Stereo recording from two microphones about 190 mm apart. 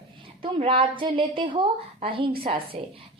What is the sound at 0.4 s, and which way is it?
A woman's voice, 30° right (ahead or behind).